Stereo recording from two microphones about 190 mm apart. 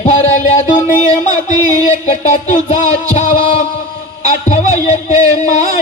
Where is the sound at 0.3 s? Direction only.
40° left (ahead or behind).